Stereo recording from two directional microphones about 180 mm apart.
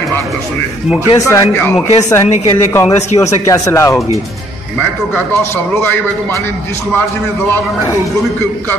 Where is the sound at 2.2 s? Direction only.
40° left (ahead or behind).